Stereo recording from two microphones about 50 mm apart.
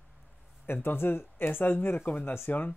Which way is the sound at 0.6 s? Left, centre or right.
Left.